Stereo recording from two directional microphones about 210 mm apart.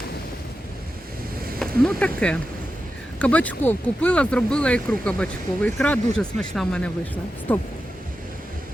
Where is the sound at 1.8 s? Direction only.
5° left (ahead or behind).